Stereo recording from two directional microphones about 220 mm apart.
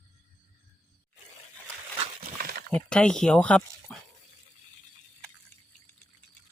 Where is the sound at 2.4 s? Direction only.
45° right (ahead or behind).